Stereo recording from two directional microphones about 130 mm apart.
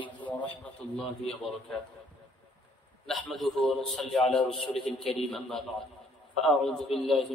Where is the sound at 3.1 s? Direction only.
Centre (ahead or behind).